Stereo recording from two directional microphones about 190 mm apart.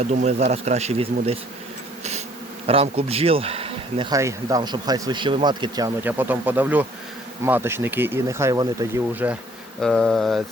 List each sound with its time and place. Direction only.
0.0 s speech: 35° right (ahead or behind)
2.6 s speech: 30° right (ahead or behind)
6.0 s speech: 10° right (ahead or behind)
9.8 s a sound: 5° left (ahead or behind)